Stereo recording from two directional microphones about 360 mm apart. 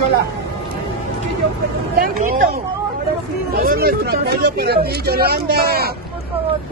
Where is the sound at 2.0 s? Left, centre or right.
Right.